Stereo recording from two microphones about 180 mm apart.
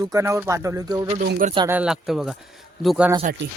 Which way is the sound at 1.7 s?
5° right (ahead or behind).